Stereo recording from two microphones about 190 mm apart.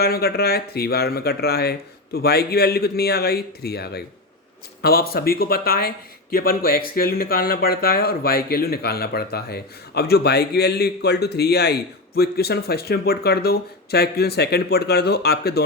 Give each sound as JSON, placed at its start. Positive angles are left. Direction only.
{"t": 0.0, "sound": "speech", "side_deg": 55}